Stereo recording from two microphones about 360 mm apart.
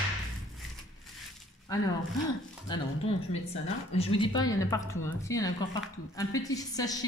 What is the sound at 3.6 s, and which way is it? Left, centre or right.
A woman's voice, centre.